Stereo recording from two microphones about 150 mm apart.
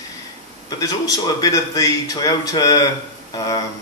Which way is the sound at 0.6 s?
25° left (ahead or behind).